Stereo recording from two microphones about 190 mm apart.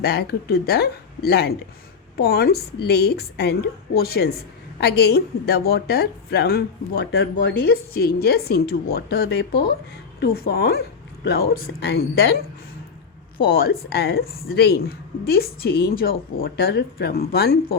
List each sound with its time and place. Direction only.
0.0 s a woman's voice: 55° left (ahead or behind)
13.4 s speech: 50° left (ahead or behind)